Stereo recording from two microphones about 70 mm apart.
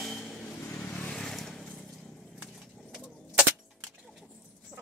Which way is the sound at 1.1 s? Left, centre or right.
Centre.